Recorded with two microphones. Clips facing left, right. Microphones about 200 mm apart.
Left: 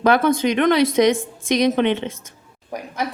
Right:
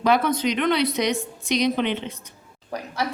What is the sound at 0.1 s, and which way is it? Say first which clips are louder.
A woman's voice: left 3 dB; 50° left (ahead or behind).